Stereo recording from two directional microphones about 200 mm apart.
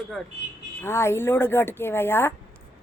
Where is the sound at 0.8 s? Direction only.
15° left (ahead or behind).